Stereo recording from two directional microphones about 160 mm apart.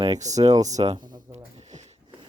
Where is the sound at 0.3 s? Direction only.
45° right (ahead or behind).